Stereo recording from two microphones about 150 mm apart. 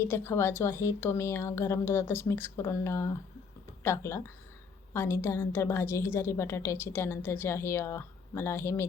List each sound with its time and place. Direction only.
0.0 s a woman's voice: 15° left (ahead or behind)